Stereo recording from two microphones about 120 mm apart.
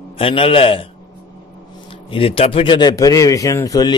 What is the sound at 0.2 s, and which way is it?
Speech, 50° left (ahead or behind).